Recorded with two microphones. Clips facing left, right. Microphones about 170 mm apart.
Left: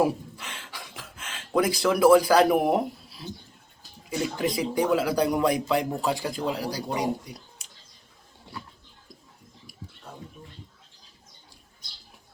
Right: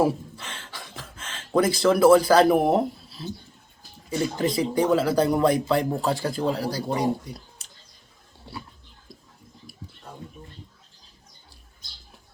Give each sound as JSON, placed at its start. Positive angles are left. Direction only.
{"t": 0.0, "sound": "a sound", "side_deg": 10}
{"t": 2.7, "sound": "speech", "side_deg": 10}
{"t": 6.3, "sound": "speech", "side_deg": -35}
{"t": 6.6, "sound": "speech", "side_deg": 15}